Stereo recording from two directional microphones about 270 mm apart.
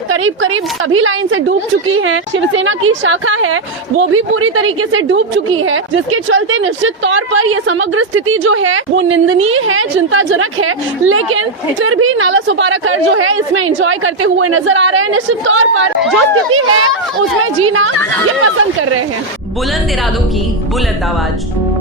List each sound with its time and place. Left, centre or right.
0.1 s a woman's voice: right